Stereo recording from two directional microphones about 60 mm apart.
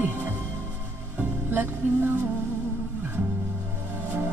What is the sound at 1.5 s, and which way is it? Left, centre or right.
Music, right.